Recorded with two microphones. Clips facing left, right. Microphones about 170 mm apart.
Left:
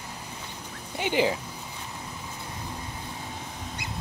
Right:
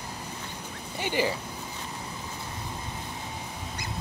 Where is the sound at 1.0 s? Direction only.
15° left (ahead or behind).